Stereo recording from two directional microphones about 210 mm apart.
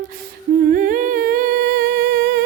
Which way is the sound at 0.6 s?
40° right (ahead or behind).